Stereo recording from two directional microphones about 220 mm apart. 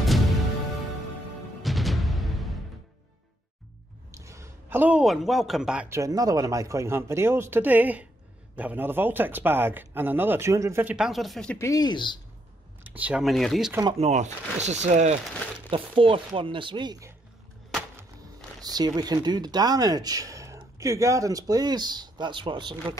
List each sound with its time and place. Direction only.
1.6 s music: centre (ahead or behind)
4.1 s speech: 15° right (ahead or behind)
11.5 s speech: 15° left (ahead or behind)
12.8 s speech: 5° right (ahead or behind)
13.9 s speech: 30° right (ahead or behind)
18.6 s speech: 15° right (ahead or behind)